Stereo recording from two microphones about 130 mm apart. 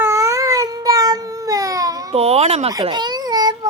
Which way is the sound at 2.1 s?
50° right (ahead or behind).